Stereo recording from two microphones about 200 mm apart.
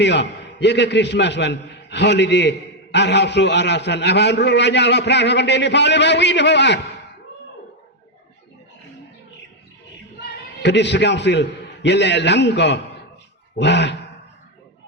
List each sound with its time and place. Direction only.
0.0 s a man's voice: 60° left (ahead or behind)
10.2 s a man's voice: 60° left (ahead or behind)